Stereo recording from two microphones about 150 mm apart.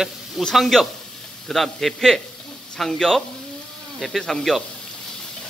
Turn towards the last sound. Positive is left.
turn(degrees=0)  # may be behind; listen again after turning